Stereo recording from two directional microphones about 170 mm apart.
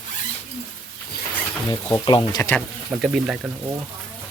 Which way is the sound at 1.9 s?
25° left (ahead or behind).